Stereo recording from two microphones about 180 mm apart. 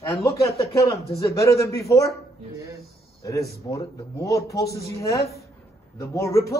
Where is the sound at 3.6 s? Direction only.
20° left (ahead or behind).